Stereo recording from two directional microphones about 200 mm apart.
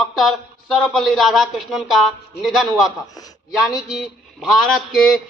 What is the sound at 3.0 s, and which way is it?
Speech, 20° left (ahead or behind).